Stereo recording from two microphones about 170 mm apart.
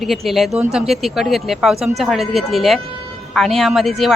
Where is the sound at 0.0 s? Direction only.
Centre (ahead or behind).